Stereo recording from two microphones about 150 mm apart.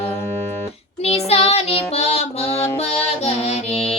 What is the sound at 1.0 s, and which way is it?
Child singing, 40° left (ahead or behind).